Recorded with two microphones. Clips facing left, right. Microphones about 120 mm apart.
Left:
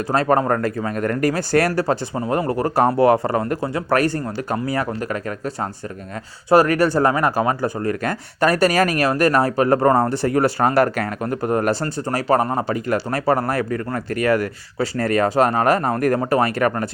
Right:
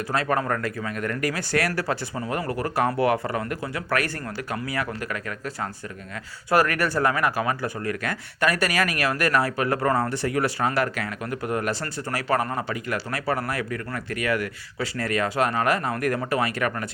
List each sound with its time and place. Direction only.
0.1 s speech: 35° left (ahead or behind)
6.5 s speech: 30° left (ahead or behind)